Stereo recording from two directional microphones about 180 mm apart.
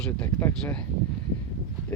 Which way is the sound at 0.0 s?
10° left (ahead or behind).